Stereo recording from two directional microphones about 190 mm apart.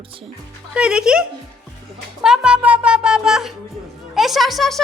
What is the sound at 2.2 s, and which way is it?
Music, 5° right (ahead or behind).